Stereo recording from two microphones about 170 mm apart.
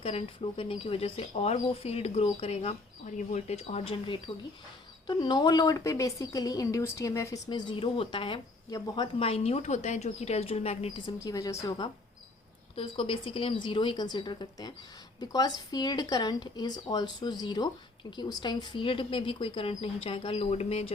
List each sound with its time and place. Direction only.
0.0 s a woman's voice: 35° left (ahead or behind); by 7.3 s 20° left (ahead or behind)
7.5 s a woman's voice: 30° left (ahead or behind)